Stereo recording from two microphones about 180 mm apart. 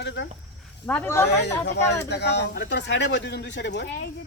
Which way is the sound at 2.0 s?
70° left (ahead or behind).